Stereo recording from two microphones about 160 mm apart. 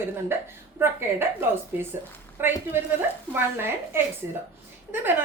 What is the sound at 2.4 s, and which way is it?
A woman's voice, 15° right (ahead or behind).